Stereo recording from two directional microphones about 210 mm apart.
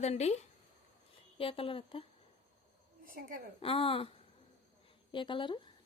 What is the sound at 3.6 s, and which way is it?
Speech, 25° left (ahead or behind).